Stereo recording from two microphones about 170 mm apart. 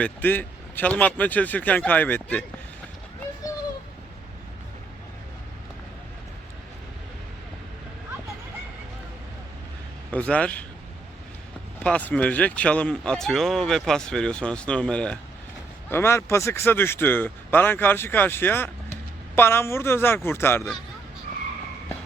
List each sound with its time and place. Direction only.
0.0 s speech: 10° left (ahead or behind)
10.1 s speech: 10° left (ahead or behind)
11.8 s speech: 10° left (ahead or behind)
21.3 s skidding: 55° right (ahead or behind)